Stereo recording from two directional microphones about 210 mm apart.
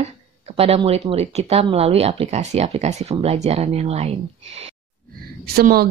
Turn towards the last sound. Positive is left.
turn(degrees=-45)  # may be behind; listen again after turning